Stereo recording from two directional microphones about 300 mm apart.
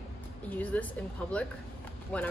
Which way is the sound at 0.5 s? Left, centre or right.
Centre.